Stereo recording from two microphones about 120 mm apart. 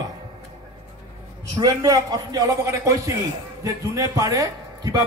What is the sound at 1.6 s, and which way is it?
A man's voice, 35° right (ahead or behind).